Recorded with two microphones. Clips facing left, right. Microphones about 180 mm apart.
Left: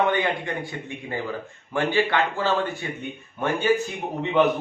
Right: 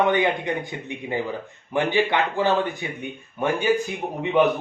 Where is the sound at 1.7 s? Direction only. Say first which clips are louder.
Right 1 dB; 20° right (ahead or behind).